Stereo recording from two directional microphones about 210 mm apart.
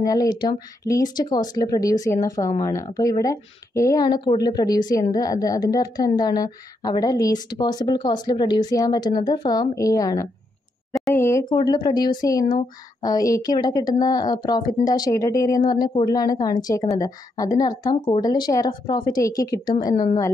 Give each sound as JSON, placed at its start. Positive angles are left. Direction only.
{"t": 0.0, "sound": "a woman's voice", "side_deg": 15}